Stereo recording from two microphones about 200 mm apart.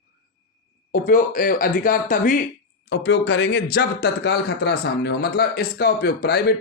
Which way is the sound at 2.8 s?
60° left (ahead or behind).